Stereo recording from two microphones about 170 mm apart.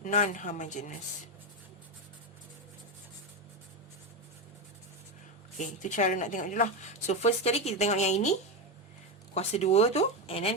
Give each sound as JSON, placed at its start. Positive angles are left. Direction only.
{"t": 0.0, "sound": "speech", "side_deg": 45}
{"t": 5.5, "sound": "a woman's voice", "side_deg": 45}